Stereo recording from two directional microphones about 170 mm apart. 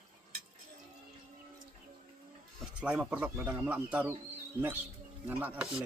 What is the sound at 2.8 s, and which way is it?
Speech, 5° right (ahead or behind).